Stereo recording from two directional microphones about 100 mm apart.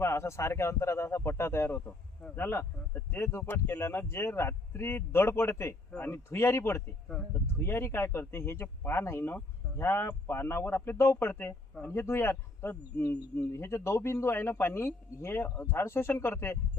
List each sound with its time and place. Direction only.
0.0 s a man's voice: 25° left (ahead or behind)